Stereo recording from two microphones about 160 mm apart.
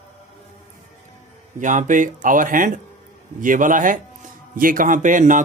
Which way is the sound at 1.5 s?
55° right (ahead or behind).